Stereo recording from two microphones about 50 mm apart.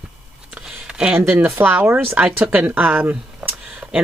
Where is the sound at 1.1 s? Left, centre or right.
Right.